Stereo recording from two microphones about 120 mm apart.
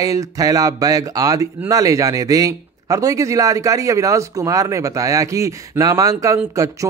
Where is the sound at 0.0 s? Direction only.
30° right (ahead or behind).